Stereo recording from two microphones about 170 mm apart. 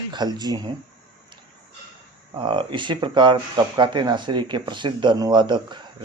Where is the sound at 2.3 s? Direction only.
30° right (ahead or behind).